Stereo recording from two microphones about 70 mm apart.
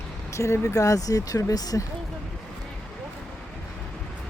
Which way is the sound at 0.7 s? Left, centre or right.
Left.